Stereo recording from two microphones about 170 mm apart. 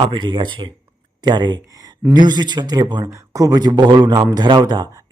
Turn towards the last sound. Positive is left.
turn(degrees=-25)  # may be behind; listen again after turning